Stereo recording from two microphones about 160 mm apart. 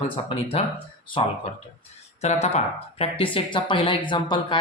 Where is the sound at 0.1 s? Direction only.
35° left (ahead or behind).